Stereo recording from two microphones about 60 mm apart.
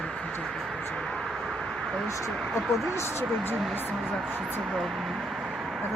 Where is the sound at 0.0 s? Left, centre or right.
Centre.